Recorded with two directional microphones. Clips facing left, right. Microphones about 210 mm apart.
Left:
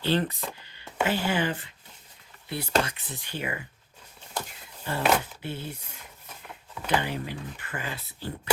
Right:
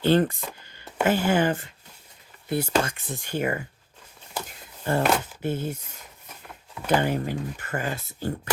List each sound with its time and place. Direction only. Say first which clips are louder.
0.0 s speech: right 6 dB; 50° right (ahead or behind)
0.6 s a sound: right 2 dB; 45° right (ahead or behind)
1.0 s speech: right 5 dB; 45° right (ahead or behind)
4.9 s speech: right 2 dB; 45° right (ahead or behind)
6.8 s speech: right 5 dB; 45° right (ahead or behind)